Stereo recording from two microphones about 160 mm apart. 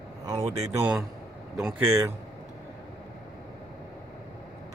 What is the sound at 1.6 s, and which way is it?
Speech, 5° right (ahead or behind).